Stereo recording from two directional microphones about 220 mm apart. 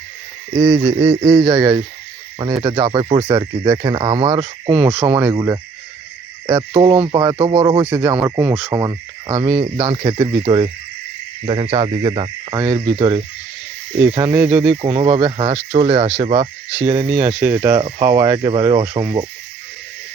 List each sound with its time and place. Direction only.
0.7 s speech: 5° right (ahead or behind)
0.9 s speech: 25° right (ahead or behind)
4.4 s speech: 10° right (ahead or behind)
6.7 s speech: 20° right (ahead or behind)
7.9 s speech: 10° right (ahead or behind)
11.4 s speech: 25° right (ahead or behind)
14.0 s speech: 10° right (ahead or behind)
14.8 s speech: 20° right (ahead or behind)
16.7 s speech: 10° right (ahead or behind)